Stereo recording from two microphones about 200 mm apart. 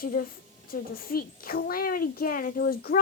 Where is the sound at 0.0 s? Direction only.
45° left (ahead or behind).